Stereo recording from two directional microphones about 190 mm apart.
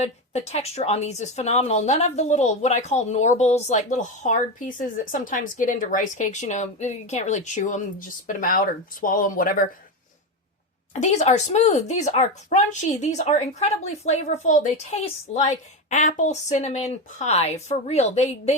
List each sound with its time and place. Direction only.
0.0 s a woman's voice: 35° left (ahead or behind)
11.0 s speech: 40° left (ahead or behind)